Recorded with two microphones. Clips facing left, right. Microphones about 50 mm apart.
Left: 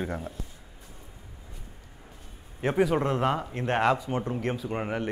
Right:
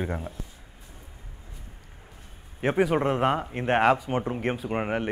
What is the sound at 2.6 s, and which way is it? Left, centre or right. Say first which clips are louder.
Speech: right 1 dB; centre.